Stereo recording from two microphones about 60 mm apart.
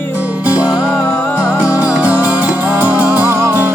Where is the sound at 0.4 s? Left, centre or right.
Right.